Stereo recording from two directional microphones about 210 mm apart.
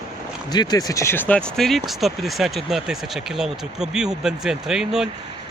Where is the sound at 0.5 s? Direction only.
20° left (ahead or behind).